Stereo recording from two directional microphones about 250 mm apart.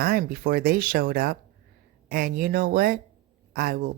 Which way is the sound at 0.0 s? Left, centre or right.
Right.